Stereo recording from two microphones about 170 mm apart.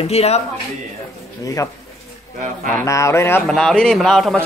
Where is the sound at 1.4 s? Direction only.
20° left (ahead or behind).